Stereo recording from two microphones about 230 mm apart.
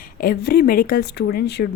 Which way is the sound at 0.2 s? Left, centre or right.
Left.